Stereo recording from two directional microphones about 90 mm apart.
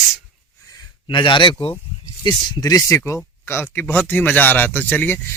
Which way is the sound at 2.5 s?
45° left (ahead or behind).